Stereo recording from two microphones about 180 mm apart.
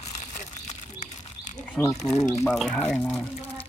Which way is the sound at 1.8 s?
20° left (ahead or behind).